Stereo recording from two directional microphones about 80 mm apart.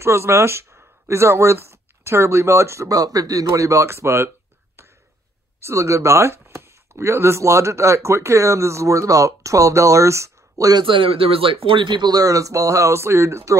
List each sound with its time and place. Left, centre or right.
0.0 s speech: right
5.6 s speech: right
10.8 s speech: right